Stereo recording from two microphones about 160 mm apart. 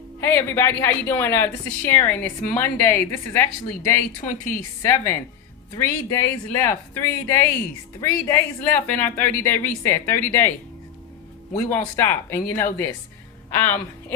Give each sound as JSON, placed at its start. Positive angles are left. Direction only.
{"t": 0.2, "sound": "speech", "side_deg": 15}
{"t": 11.5, "sound": "a woman's voice", "side_deg": 15}